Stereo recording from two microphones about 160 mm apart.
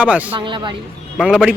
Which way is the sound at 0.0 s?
10° right (ahead or behind).